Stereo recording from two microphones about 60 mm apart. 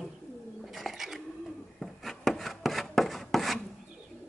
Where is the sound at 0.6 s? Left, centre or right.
Centre.